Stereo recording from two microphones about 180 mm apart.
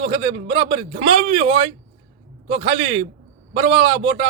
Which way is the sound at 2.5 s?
30° right (ahead or behind).